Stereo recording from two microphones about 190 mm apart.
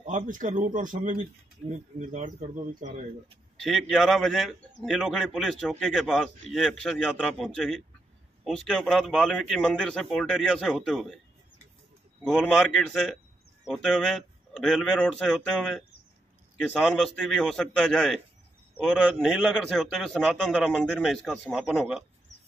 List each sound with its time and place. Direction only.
0.0 s speech: 40° right (ahead or behind)
3.6 s a man's voice: centre (ahead or behind)
12.2 s a man's voice: 5° left (ahead or behind)